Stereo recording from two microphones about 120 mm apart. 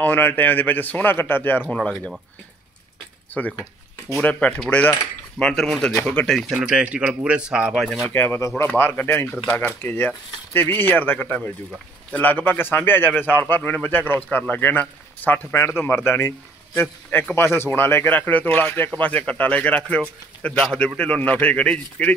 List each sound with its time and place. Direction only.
0.0 s speech: 15° left (ahead or behind)
3.4 s speech: 10° left (ahead or behind); by 7.7 s 10° right (ahead or behind)
7.7 s speech: centre (ahead or behind)
8.0 s speech: 20° left (ahead or behind)